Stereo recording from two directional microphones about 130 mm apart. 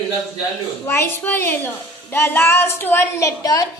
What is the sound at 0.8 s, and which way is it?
A woman's voice, 20° left (ahead or behind).